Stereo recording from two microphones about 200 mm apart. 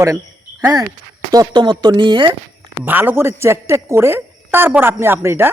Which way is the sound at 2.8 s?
10° right (ahead or behind).